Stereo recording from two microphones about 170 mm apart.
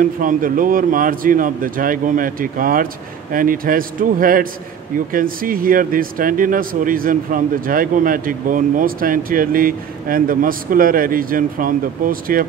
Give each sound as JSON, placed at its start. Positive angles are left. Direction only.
{"t": 0.0, "sound": "speech", "side_deg": -50}